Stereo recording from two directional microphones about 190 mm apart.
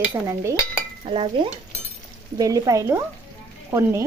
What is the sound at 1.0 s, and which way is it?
Speech, 30° right (ahead or behind).